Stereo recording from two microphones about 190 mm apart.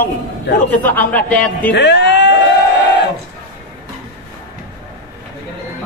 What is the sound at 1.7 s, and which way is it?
Speech, 65° left (ahead or behind).